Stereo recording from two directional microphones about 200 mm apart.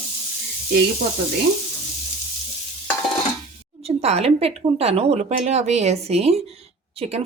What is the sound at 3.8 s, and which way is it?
Speech, 30° right (ahead or behind).